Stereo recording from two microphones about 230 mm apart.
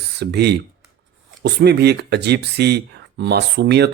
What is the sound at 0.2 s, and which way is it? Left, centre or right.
Speech, right.